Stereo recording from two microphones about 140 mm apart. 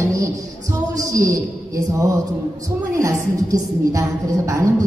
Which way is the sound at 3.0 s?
25° right (ahead or behind).